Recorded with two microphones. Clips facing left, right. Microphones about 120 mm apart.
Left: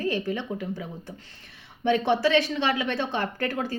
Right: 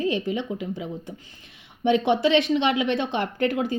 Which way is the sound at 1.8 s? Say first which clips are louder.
Right 2 dB; 20° right (ahead or behind).